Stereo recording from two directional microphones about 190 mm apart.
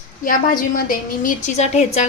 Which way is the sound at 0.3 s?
45° left (ahead or behind).